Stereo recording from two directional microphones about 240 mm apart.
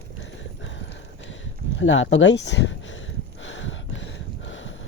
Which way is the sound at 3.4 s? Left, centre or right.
Left.